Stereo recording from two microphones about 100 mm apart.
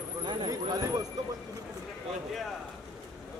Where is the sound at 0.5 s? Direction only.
40° right (ahead or behind).